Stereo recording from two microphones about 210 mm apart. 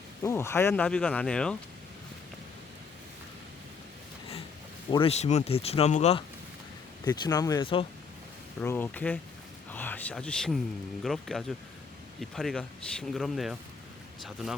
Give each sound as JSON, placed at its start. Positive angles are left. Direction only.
{"t": 0.2, "sound": "speech", "side_deg": 10}
{"t": 4.9, "sound": "speech", "side_deg": 25}
{"t": 7.0, "sound": "speech", "side_deg": 15}
{"t": 8.6, "sound": "speech", "side_deg": 10}
{"t": 9.7, "sound": "a sound", "side_deg": 10}
{"t": 11.0, "sound": "speech", "side_deg": 0}